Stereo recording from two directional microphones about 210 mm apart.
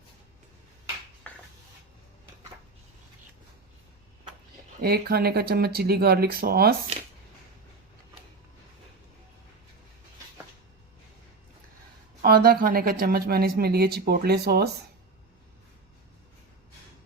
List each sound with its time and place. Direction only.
1.2 s a sound: 5° left (ahead or behind)
4.8 s speech: 50° right (ahead or behind)
12.2 s speech: 45° right (ahead or behind)